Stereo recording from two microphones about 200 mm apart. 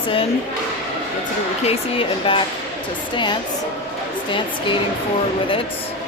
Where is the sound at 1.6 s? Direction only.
25° left (ahead or behind).